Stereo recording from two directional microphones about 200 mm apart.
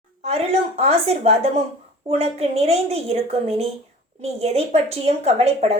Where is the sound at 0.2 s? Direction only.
30° right (ahead or behind).